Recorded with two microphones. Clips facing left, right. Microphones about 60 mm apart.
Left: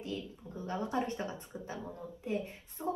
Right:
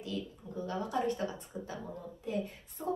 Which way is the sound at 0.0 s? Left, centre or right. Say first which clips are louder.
Right 1 dB; left.